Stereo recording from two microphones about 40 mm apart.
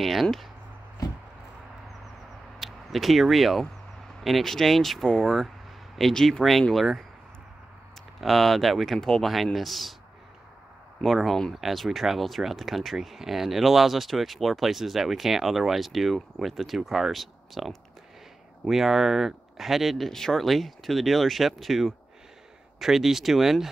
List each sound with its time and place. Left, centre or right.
0.0 s speech: centre
2.6 s speech: centre
5.0 s speech: centre
5.9 s speech: centre
8.2 s speech: centre
11.0 s speech: centre
20.1 s speech: centre